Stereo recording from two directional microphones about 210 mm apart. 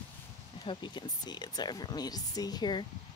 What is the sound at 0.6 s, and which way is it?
Speech, 20° left (ahead or behind).